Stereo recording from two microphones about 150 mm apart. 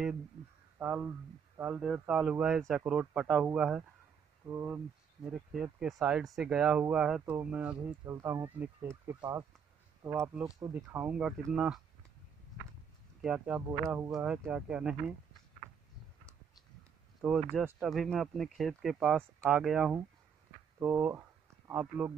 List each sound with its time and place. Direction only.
0.7 s speech: 10° right (ahead or behind)
8.1 s speech: 20° right (ahead or behind)
13.2 s speech: 5° right (ahead or behind)
17.2 s speech: centre (ahead or behind)